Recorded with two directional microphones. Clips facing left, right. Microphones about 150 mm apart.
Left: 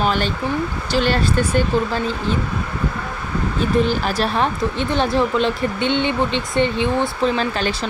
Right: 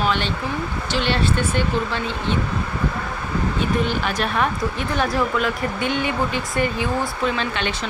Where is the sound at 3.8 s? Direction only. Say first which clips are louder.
Left 3 dB; 35° left (ahead or behind).